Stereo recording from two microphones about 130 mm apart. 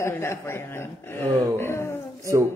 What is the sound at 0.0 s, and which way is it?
Speech, 20° left (ahead or behind).